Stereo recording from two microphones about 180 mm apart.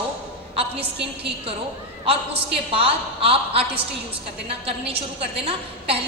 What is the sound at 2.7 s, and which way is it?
A woman's voice, 30° right (ahead or behind).